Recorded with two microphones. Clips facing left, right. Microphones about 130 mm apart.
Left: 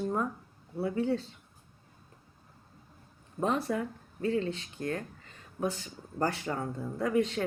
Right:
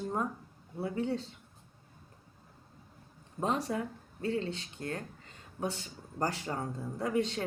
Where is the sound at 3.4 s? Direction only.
30° right (ahead or behind).